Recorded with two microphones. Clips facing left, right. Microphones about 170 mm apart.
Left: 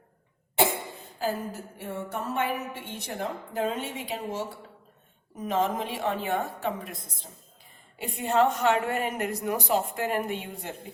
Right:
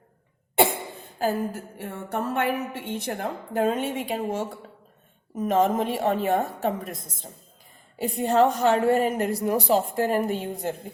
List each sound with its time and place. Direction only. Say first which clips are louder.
1.8 s a woman's voice: right 4 dB; 60° right (ahead or behind); by 10.8 s 40° right (ahead or behind)